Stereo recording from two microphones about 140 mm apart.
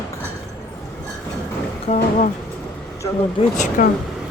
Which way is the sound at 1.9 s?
60° left (ahead or behind).